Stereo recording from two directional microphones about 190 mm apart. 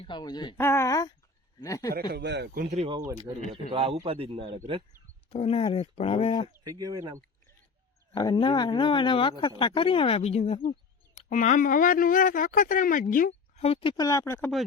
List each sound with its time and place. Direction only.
0.0 s a man's voice: 25° left (ahead or behind)
1.9 s speech: 55° right (ahead or behind)
2.6 s speech: 35° right (ahead or behind)
3.3 s speech: 20° right (ahead or behind)
5.3 s speech: 30° left (ahead or behind)
6.5 s speech: 20° right (ahead or behind)
8.1 s speech: 20° left (ahead or behind); by 13.7 s 45° left (ahead or behind)
13.7 s speech: 30° left (ahead or behind); by 14.5 s 15° left (ahead or behind)